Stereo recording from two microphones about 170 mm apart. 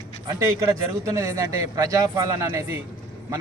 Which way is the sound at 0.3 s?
20° right (ahead or behind).